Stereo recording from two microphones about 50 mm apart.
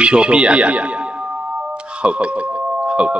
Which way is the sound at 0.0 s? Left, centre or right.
Right.